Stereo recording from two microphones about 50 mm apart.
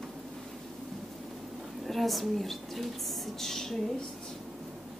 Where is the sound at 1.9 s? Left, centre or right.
Centre.